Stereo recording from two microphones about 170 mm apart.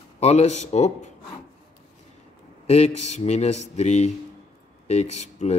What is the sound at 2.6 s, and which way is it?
Speech, 40° left (ahead or behind).